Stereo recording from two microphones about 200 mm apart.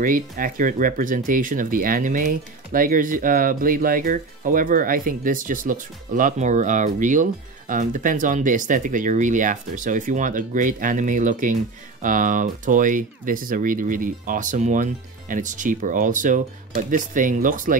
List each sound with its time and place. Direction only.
0.0 s speech: 45° right (ahead or behind)